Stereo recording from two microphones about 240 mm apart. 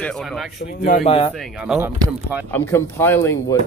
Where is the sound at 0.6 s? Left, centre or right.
Left.